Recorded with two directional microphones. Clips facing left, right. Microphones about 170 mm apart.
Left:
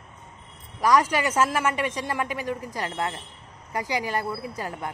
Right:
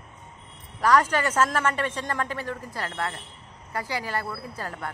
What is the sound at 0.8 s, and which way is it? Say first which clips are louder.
A man's voice: even; 10° left (ahead or behind).